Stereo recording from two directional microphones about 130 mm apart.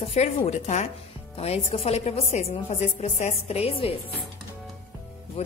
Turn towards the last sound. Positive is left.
turn(degrees=55)  # may be behind; listen again after turning